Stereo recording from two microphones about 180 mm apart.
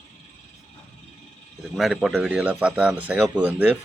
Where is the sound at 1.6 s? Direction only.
Centre (ahead or behind).